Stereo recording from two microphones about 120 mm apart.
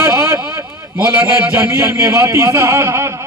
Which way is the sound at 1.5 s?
25° right (ahead or behind).